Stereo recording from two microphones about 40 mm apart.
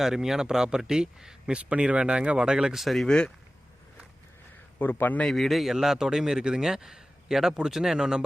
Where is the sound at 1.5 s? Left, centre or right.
Right.